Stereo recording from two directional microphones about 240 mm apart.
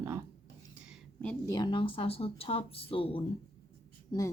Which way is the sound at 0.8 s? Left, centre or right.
Centre.